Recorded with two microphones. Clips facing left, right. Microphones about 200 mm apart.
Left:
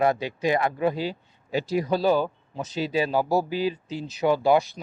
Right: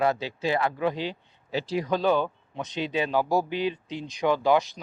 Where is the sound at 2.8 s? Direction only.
40° left (ahead or behind).